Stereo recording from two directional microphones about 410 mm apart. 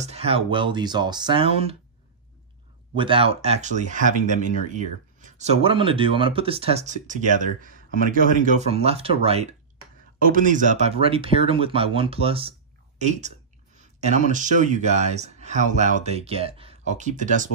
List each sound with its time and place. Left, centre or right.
0.0 s speech: centre
3.0 s speech: centre
13.7 s a sound: centre
14.3 s speech: centre